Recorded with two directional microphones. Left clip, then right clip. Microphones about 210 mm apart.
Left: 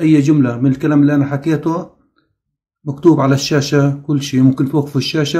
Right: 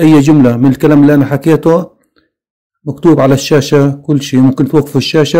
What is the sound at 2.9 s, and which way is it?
Speech, 35° right (ahead or behind).